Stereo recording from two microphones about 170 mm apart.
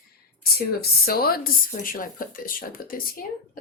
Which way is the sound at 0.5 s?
65° left (ahead or behind).